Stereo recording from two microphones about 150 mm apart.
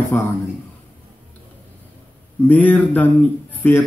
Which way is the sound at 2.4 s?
10° left (ahead or behind).